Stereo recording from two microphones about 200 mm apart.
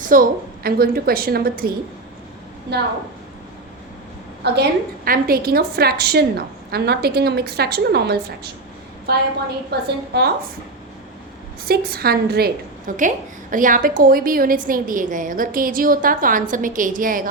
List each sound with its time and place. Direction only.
0.1 s a woman's voice: 45° right (ahead or behind)
4.4 s a woman's voice: 55° right (ahead or behind)
11.6 s a woman's voice: 50° right (ahead or behind)